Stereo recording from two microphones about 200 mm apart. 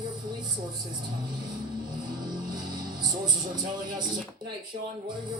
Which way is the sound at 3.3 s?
20° right (ahead or behind).